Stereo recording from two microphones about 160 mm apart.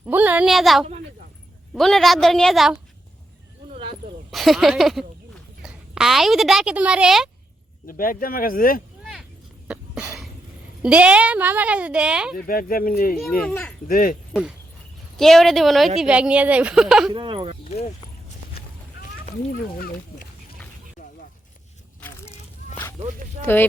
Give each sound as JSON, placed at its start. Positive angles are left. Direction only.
{"t": 0.0, "sound": "a woman's voice", "side_deg": -10}
{"t": 4.3, "sound": "speech", "side_deg": 0}
{"t": 7.9, "sound": "speech", "side_deg": 60}
{"t": 9.6, "sound": "cough", "side_deg": -5}
{"t": 10.8, "sound": "a woman's voice", "side_deg": -5}
{"t": 12.5, "sound": "speech", "side_deg": 65}
{"t": 13.4, "sound": "speech", "side_deg": 10}
{"t": 13.8, "sound": "speech", "side_deg": 60}
{"t": 15.2, "sound": "a woman's voice", "side_deg": 0}
{"t": 17.1, "sound": "speech", "side_deg": -30}